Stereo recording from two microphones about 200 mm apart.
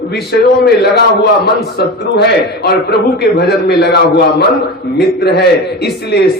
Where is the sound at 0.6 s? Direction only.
55° left (ahead or behind).